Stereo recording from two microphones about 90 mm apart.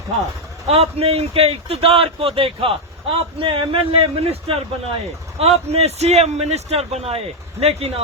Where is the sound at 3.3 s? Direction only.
75° right (ahead or behind).